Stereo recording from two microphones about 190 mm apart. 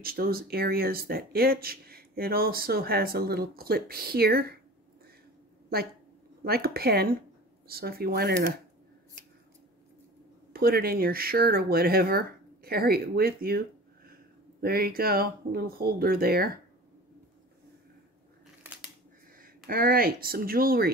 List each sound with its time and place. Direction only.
0.0 s speech: 50° right (ahead or behind)
6.4 s speech: 55° right (ahead or behind)
10.5 s speech: 55° right (ahead or behind)
19.4 s speech: 50° right (ahead or behind)